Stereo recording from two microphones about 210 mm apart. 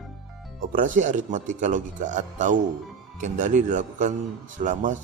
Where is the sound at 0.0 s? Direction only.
Centre (ahead or behind).